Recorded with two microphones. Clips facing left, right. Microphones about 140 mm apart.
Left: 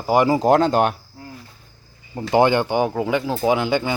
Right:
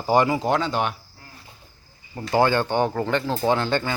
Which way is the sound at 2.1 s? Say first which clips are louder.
Left 3 dB; 20° left (ahead or behind).